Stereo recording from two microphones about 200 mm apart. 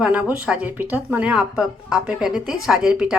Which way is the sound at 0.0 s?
5° right (ahead or behind).